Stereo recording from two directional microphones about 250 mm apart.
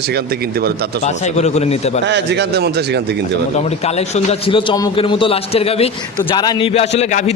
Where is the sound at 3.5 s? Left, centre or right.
Left.